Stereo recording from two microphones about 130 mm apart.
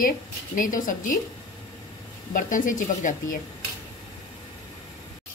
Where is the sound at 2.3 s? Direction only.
90° left.